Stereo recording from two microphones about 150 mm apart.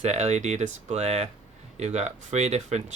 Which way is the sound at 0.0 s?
50° right (ahead or behind).